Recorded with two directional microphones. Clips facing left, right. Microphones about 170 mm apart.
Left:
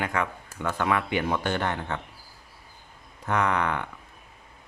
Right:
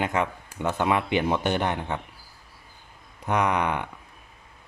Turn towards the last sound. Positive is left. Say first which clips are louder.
# right 1 dB
turn(degrees=-15)  # may be behind; listen again after turning